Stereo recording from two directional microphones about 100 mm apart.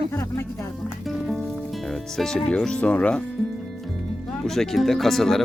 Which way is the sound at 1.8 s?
5° left (ahead or behind).